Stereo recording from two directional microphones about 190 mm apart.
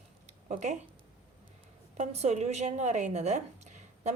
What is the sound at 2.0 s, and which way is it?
A woman's voice, 35° right (ahead or behind).